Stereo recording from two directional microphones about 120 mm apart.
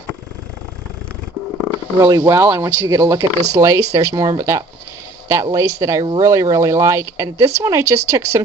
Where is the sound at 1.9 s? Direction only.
30° right (ahead or behind).